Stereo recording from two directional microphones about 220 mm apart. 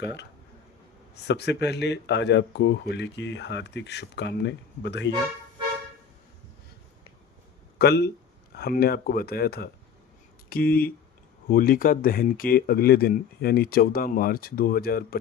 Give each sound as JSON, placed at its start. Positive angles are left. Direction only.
{"t": 0.0, "sound": "speech", "side_deg": 50}
{"t": 7.8, "sound": "speech", "side_deg": 50}